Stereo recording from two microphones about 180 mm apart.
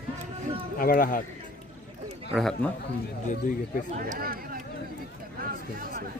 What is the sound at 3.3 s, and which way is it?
Speech, 50° left (ahead or behind).